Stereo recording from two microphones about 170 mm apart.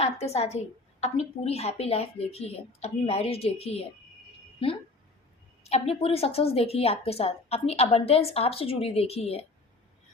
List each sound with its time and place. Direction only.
0.0 s a woman's voice: 40° left (ahead or behind)
5.6 s a woman's voice: 40° left (ahead or behind)